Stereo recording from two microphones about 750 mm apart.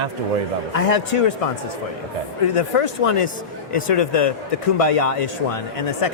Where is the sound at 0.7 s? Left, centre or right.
Left.